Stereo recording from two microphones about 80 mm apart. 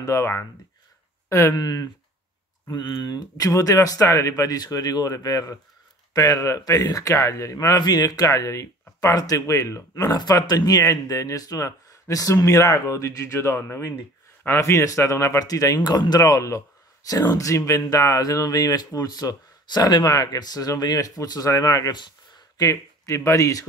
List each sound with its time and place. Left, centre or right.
0.0 s speech: left
1.5 s speech: left
2.7 s a man's voice: left
10.1 s a man's voice: left